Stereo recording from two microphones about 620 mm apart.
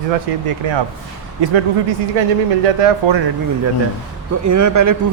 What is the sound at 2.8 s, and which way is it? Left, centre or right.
Speech, right.